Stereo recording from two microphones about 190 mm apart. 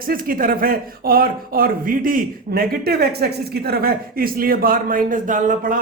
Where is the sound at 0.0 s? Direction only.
50° right (ahead or behind).